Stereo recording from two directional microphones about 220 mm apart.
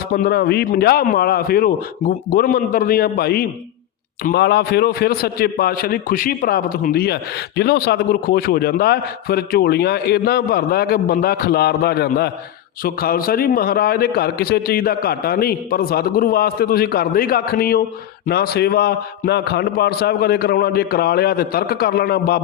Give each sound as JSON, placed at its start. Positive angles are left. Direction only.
{"t": 0.1, "sound": "a man's voice", "side_deg": 45}